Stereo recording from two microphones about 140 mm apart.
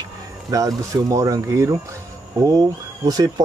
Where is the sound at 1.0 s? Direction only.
25° right (ahead or behind).